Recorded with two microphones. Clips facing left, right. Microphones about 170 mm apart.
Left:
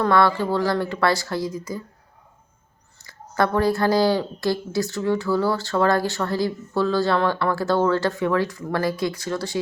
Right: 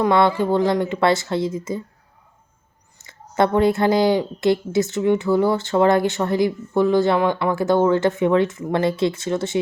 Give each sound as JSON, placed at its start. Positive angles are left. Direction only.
{"t": 0.0, "sound": "speech", "side_deg": -20}
{"t": 3.0, "sound": "speech", "side_deg": -20}